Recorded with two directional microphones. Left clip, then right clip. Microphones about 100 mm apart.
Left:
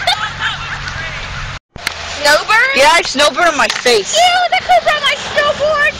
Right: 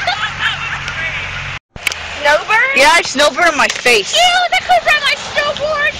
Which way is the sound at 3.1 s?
20° right (ahead or behind).